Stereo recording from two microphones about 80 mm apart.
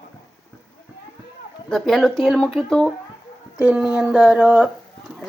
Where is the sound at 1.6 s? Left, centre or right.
Centre.